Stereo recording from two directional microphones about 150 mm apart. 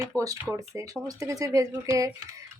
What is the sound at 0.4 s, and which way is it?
Speech, 20° right (ahead or behind).